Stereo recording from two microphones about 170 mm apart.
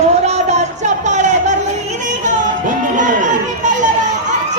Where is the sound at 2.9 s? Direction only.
45° right (ahead or behind).